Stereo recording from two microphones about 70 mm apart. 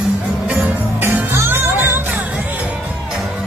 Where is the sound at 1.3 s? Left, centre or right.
Right.